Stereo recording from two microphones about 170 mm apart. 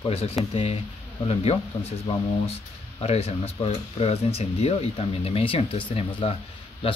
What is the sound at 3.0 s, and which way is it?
Speech, 35° left (ahead or behind).